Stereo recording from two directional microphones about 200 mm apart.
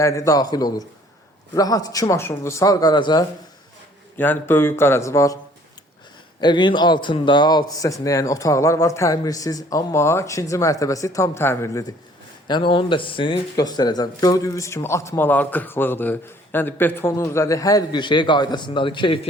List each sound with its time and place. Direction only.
0.0 s a man's voice: 15° left (ahead or behind)
4.2 s speech: 10° left (ahead or behind)
6.4 s speech: 25° left (ahead or behind)